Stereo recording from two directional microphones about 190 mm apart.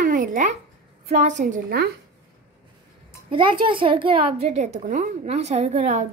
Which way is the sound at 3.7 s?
25° right (ahead or behind).